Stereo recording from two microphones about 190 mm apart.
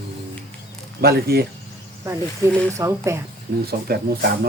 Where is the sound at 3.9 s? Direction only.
55° right (ahead or behind).